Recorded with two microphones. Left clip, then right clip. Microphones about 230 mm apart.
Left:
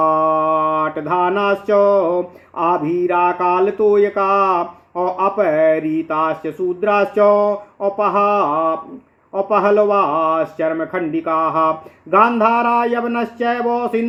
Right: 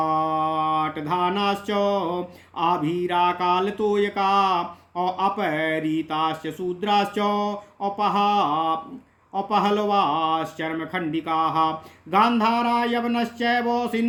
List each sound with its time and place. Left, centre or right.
0.0 s mantra: right
3.1 s speech: right